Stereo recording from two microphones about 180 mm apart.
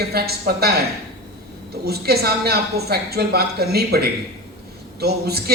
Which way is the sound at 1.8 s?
60° right (ahead or behind).